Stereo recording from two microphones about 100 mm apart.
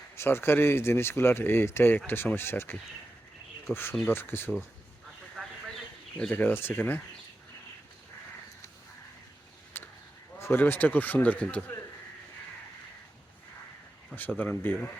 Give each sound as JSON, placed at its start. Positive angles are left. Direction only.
{"t": 0.2, "sound": "speech", "side_deg": 25}
{"t": 4.0, "sound": "speech", "side_deg": 20}
{"t": 6.1, "sound": "speech", "side_deg": 15}
{"t": 9.7, "sound": "a sound", "side_deg": 25}
{"t": 10.3, "sound": "speech", "side_deg": 25}
{"t": 14.2, "sound": "speech", "side_deg": 15}